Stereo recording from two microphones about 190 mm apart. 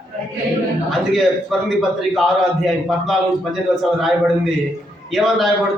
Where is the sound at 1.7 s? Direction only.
Centre (ahead or behind).